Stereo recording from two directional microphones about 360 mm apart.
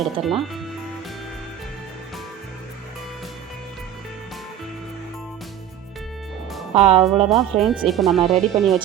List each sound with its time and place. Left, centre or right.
0.0 s speech: centre
6.7 s speech: centre
7.3 s speech: centre